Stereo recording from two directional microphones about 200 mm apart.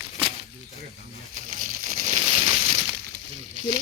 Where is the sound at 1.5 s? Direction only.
35° right (ahead or behind).